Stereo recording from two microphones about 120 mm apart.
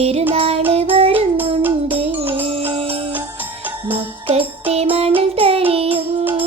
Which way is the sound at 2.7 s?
50° right (ahead or behind).